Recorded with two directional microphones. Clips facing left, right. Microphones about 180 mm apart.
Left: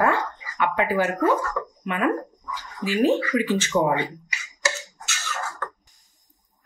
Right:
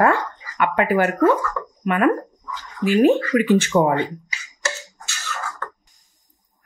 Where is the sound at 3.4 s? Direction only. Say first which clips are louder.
Right 6 dB; 55° right (ahead or behind).